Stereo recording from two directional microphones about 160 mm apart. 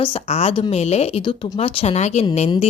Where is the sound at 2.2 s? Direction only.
35° left (ahead or behind).